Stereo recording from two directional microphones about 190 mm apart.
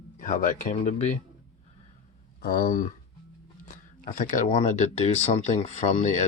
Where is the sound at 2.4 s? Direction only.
50° left (ahead or behind).